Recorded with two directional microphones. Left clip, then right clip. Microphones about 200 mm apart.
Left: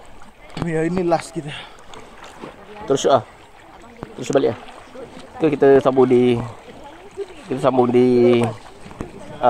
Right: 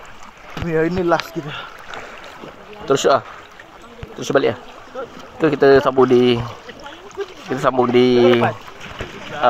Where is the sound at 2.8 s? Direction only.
5° right (ahead or behind).